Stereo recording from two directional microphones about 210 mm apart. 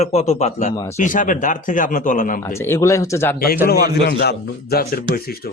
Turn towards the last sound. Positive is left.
turn(degrees=45)  # may be behind; listen again after turning